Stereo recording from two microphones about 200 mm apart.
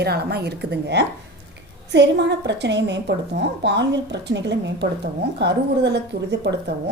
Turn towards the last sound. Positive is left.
turn(degrees=-60)  # may be behind; listen again after turning